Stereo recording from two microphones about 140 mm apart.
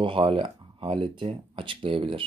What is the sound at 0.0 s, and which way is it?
Speech, 40° right (ahead or behind).